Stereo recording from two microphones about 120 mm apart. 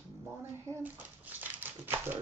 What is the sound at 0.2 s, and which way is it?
Speech, 20° right (ahead or behind).